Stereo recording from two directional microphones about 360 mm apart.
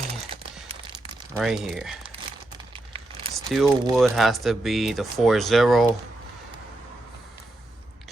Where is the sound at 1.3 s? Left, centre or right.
Centre.